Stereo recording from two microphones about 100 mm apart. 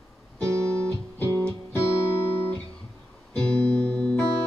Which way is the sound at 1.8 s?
25° left (ahead or behind).